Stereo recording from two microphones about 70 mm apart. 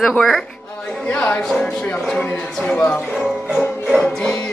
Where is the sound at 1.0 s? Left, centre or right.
Left.